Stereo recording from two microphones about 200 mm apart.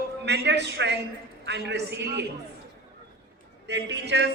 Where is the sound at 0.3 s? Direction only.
60° right (ahead or behind).